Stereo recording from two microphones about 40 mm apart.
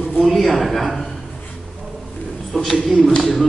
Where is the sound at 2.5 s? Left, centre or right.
Centre.